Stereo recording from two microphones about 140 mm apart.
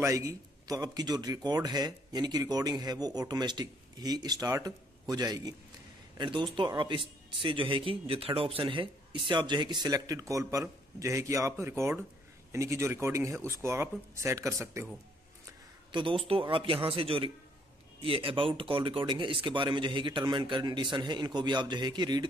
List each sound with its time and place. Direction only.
0.0 s speech: 20° right (ahead or behind)
15.9 s speech: 35° right (ahead or behind)